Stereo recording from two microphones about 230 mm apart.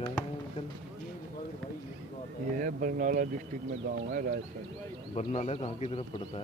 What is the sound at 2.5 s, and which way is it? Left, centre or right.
Speech, right.